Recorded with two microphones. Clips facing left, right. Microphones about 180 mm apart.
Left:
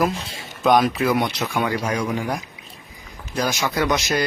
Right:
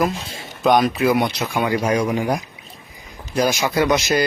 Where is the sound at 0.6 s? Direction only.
Centre (ahead or behind).